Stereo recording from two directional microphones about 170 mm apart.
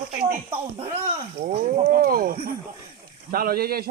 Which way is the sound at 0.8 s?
40° right (ahead or behind).